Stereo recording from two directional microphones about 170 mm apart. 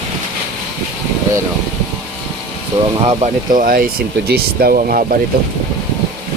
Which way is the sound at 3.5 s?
55° right (ahead or behind).